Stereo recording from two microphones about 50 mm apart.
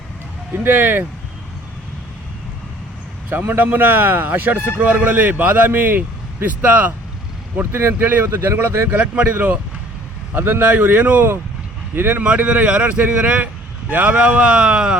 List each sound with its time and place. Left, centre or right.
0.5 s speech: right
3.6 s speech: right
4.8 s speech: right
7.6 s speech: right
8.3 s speech: right
8.5 s speech: right
9.0 s speech: right
11.9 s speech: right
12.5 s speech: right
14.2 s speech: right